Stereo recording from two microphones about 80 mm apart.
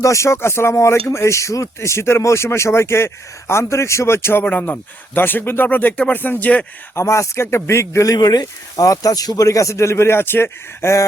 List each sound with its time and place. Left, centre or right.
0.0 s speech: left; by 6.7 s centre
6.9 s speech: left
8.1 s speech: left